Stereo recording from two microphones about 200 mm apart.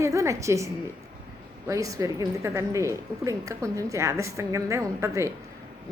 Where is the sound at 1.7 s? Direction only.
15° right (ahead or behind).